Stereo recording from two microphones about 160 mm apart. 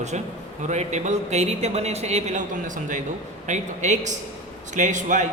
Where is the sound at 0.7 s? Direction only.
45° right (ahead or behind).